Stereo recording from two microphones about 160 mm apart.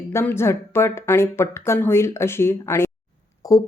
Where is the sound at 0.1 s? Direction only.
15° left (ahead or behind).